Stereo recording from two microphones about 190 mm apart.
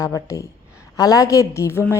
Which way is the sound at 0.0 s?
15° left (ahead or behind).